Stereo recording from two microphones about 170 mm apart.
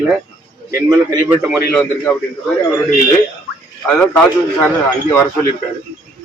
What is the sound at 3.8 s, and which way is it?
Speech, 5° left (ahead or behind).